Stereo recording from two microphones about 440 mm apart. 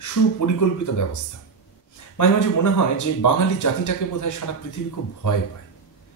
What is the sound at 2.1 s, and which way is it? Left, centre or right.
A man's voice, left.